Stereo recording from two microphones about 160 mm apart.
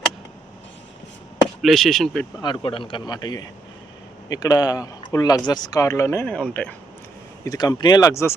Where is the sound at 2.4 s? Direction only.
30° left (ahead or behind); by 6.7 s 10° left (ahead or behind).